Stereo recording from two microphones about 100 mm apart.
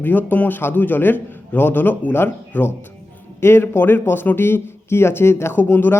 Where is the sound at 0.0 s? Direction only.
20° left (ahead or behind).